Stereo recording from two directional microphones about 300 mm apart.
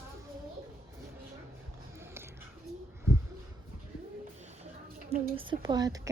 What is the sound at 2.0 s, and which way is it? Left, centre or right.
Music, centre.